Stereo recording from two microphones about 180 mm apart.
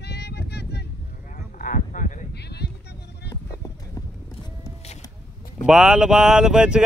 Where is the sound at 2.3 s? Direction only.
65° left (ahead or behind).